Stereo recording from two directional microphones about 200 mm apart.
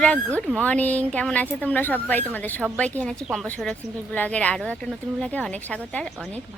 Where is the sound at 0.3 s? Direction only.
5° left (ahead or behind).